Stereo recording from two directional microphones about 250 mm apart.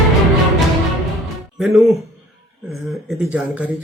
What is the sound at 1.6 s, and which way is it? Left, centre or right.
Speech, centre.